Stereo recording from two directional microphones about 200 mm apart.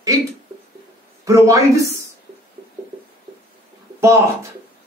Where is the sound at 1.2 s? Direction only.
15° right (ahead or behind).